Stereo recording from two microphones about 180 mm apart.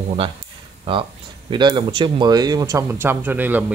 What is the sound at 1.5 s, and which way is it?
A man's voice, 25° right (ahead or behind).